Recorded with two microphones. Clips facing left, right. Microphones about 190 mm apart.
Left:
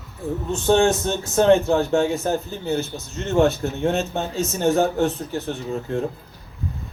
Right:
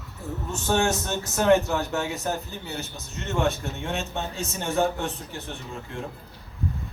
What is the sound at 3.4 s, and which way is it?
Speech, 35° left (ahead or behind).